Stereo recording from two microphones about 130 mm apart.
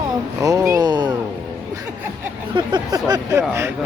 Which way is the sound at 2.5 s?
35° right (ahead or behind).